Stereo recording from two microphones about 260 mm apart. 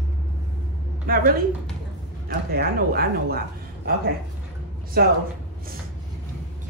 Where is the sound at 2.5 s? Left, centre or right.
Right.